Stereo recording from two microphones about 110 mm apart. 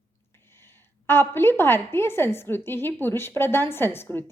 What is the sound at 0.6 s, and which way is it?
A woman's voice, 20° left (ahead or behind).